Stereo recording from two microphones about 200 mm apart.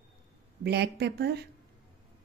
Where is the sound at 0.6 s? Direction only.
55° right (ahead or behind).